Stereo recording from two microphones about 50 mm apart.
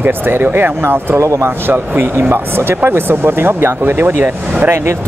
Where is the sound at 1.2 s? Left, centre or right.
Right.